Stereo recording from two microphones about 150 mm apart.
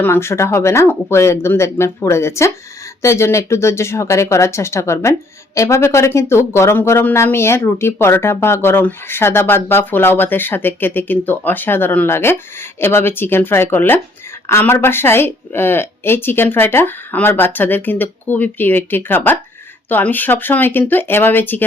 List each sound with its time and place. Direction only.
0.0 s speech: 15° left (ahead or behind)